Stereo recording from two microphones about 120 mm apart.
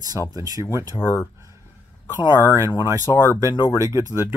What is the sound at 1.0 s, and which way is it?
Speech, 20° left (ahead or behind).